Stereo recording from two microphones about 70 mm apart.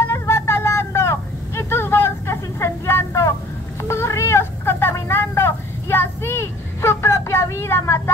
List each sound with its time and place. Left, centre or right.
0.0 s vehicle: left
3.8 s cat: left